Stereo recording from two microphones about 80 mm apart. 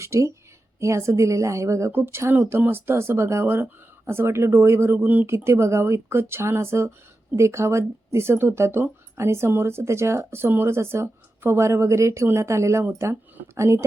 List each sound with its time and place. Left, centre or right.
0.0 s speech: right
1.9 s speech: right